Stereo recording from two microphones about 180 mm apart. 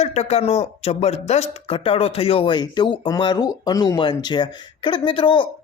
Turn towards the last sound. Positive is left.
turn(degrees=25)  # may be behind; listen again after turning